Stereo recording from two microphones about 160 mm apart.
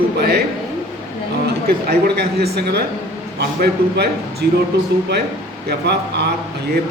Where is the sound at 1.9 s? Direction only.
85° right.